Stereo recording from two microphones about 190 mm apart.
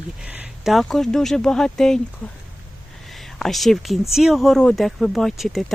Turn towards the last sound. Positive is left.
turn(degrees=0)  # may be behind; listen again after turning